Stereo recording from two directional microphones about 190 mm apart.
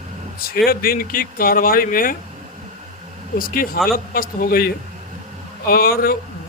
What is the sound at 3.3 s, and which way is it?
Speech, 50° left (ahead or behind).